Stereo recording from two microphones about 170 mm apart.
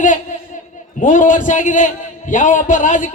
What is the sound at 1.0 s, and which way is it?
A man's voice, 50° left (ahead or behind).